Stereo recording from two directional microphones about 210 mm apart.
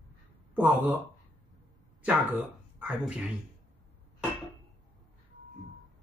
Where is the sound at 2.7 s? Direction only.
5° right (ahead or behind).